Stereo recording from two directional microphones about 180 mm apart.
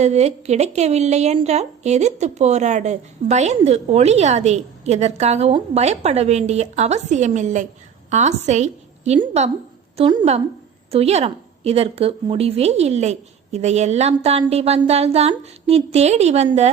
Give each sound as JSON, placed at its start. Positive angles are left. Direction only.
{"t": 0.0, "sound": "a woman's voice", "side_deg": -35}